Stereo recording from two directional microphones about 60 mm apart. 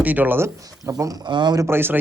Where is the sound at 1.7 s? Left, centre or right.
Right.